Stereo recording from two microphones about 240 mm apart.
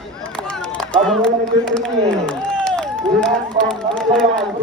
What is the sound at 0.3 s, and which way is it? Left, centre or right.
Run, centre.